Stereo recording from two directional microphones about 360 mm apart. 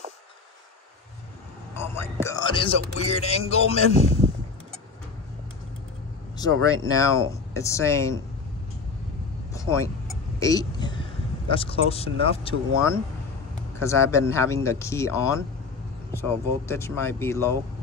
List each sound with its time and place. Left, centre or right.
1.8 s speech: centre
6.3 s speech: centre
9.5 s vehicle: centre
10.4 s speech: centre
13.7 s speech: centre